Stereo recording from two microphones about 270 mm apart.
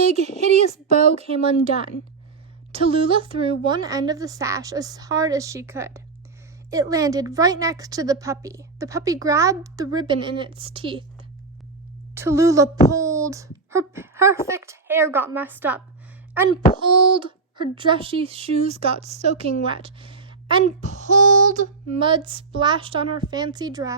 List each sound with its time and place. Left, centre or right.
0.0 s a sound: right
0.9 s a woman's voice: right
16.8 s a woman's voice: centre